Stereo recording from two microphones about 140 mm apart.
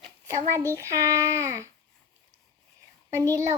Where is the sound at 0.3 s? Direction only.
20° right (ahead or behind).